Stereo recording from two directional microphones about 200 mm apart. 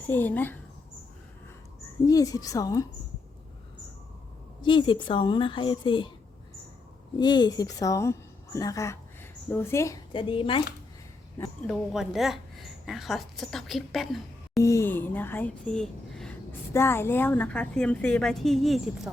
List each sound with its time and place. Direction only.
0.1 s speech: 10° left (ahead or behind)
2.0 s speech: 15° left (ahead or behind)
4.6 s a woman's voice: 25° left (ahead or behind)
7.2 s a woman's voice: 20° left (ahead or behind)
11.3 s a woman's voice: 5° left (ahead or behind)
14.6 s speech: 15° left (ahead or behind)